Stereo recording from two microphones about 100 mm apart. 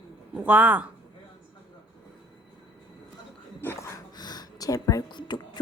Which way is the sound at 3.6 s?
25° left (ahead or behind).